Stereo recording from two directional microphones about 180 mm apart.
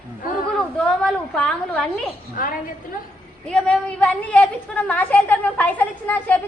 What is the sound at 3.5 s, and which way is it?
A woman's voice, 5° left (ahead or behind).